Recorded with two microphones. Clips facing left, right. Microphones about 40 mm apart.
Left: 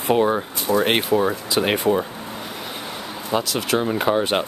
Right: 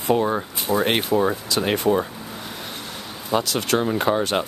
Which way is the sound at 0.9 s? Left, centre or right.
Centre.